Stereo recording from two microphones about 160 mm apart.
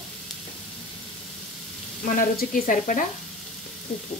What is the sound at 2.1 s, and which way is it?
Speech, 60° left (ahead or behind).